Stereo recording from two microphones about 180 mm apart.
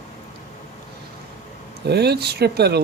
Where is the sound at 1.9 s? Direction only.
65° right (ahead or behind).